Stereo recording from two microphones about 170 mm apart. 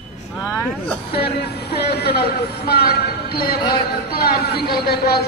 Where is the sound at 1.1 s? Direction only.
70° left (ahead or behind).